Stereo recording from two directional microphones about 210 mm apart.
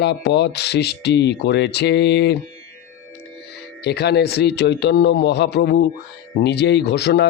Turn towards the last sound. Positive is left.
turn(degrees=50)  # may be behind; listen again after turning